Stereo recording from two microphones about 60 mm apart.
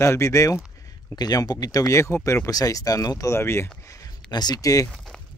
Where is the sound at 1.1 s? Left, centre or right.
Left.